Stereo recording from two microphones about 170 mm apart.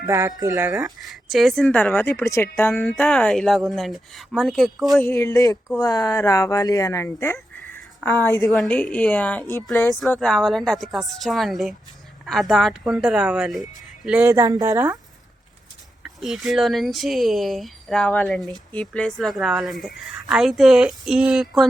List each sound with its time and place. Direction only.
0.0 s speech: 15° right (ahead or behind)
0.9 s speech: centre (ahead or behind)
5.0 s speech: 15° left (ahead or behind); by 14.9 s 20° right (ahead or behind)
16.0 s speech: centre (ahead or behind)